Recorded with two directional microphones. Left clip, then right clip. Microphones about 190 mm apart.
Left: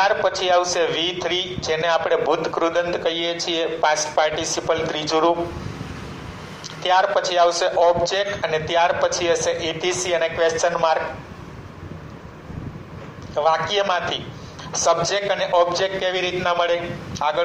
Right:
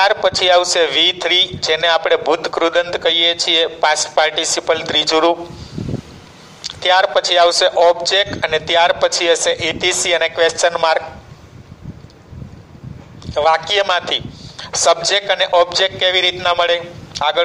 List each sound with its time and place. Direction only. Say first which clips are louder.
0.0 s a man's voice: right 5 dB; 60° right (ahead or behind)
6.6 s a man's voice: right 5 dB; 60° right (ahead or behind)
13.3 s a man's voice: right 5 dB; 60° right (ahead or behind)